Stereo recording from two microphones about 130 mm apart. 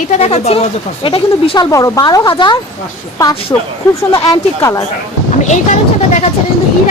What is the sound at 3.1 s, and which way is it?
Speech, 25° left (ahead or behind).